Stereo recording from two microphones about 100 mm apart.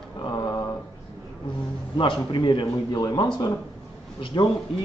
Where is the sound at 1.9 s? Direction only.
50° left (ahead or behind).